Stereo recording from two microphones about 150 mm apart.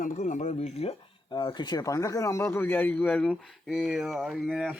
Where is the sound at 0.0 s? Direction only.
55° left (ahead or behind).